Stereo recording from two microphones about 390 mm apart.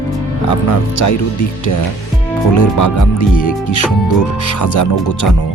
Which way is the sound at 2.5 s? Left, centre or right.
Left.